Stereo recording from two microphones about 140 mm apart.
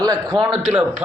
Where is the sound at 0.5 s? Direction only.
5° right (ahead or behind).